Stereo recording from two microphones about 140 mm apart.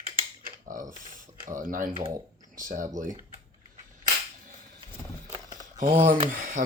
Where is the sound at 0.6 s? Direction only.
65° right (ahead or behind).